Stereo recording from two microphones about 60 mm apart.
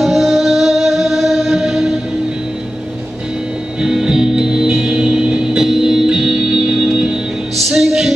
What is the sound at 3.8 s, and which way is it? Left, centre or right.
Music, centre.